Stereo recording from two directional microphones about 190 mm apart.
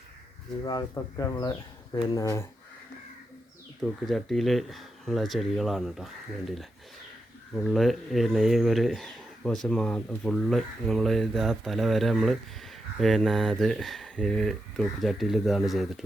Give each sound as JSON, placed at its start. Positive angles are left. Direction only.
{"t": 0.6, "sound": "speech", "side_deg": 20}
{"t": 4.0, "sound": "speech", "side_deg": 0}